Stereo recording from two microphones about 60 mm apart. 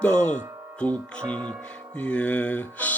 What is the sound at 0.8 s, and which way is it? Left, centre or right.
Speech, left.